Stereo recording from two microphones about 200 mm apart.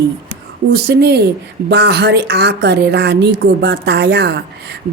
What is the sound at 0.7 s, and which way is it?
Speech, 55° right (ahead or behind).